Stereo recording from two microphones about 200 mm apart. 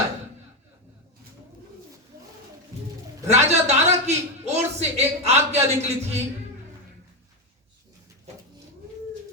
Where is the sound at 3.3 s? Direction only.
35° right (ahead or behind).